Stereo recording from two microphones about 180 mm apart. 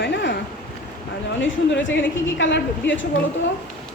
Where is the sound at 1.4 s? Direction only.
90° left.